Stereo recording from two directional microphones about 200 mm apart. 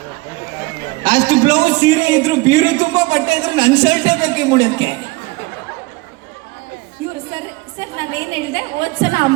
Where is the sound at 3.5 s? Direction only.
20° right (ahead or behind).